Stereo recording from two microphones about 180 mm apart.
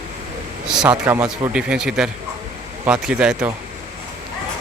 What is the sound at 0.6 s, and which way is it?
Speech, 5° right (ahead or behind).